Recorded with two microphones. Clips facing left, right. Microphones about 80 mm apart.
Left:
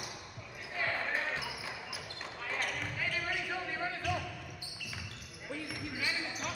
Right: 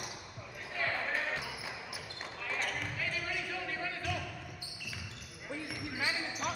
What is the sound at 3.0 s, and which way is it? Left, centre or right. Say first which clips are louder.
Basketball bounce: left 1 dB; left.